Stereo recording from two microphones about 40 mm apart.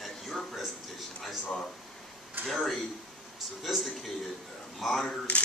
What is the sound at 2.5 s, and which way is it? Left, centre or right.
Speech, centre.